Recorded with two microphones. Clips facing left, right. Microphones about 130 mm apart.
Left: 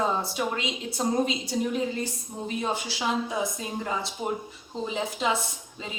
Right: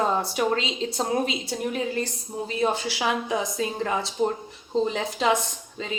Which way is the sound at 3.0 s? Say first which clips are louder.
Right 2 dB; 90° right.